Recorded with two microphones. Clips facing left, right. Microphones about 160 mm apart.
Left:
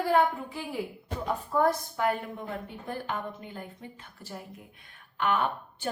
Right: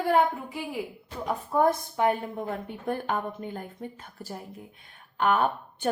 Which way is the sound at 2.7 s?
55° right (ahead or behind).